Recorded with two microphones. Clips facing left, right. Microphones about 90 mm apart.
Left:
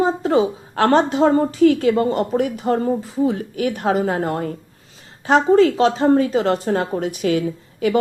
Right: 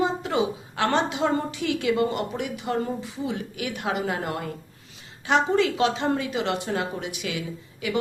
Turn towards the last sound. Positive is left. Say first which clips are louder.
# left 10 dB
turn(degrees=40)  # may be behind; listen again after turning